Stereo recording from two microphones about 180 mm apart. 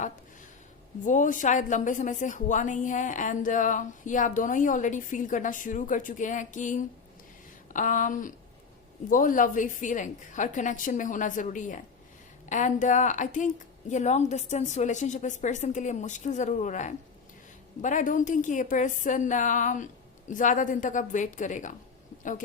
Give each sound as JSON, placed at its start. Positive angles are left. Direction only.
{"t": 1.0, "sound": "a woman's voice", "side_deg": 45}